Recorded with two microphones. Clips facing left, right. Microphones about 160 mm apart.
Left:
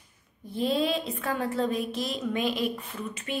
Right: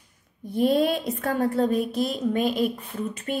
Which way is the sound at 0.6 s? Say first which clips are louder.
Right 5 dB; 50° right (ahead or behind).